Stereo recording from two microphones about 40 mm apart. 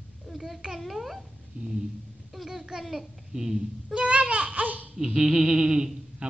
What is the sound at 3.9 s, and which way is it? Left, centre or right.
Speech, right.